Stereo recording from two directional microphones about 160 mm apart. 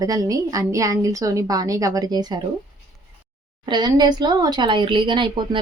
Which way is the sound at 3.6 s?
25° right (ahead or behind).